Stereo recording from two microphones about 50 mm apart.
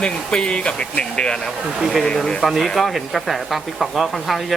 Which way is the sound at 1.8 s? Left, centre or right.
Centre.